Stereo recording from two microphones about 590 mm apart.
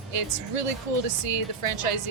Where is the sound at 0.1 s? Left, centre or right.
Right.